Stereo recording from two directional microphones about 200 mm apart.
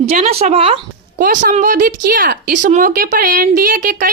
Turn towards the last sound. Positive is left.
turn(degrees=-40)  # may be behind; listen again after turning